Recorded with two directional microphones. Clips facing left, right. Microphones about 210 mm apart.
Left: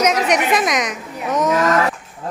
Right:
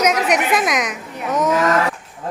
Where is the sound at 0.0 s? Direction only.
Centre (ahead or behind).